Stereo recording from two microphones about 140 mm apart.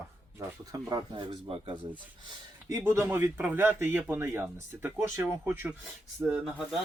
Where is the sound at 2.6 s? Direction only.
20° right (ahead or behind); by 6.7 s centre (ahead or behind).